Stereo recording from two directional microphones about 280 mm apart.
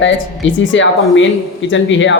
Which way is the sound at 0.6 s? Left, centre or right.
Left.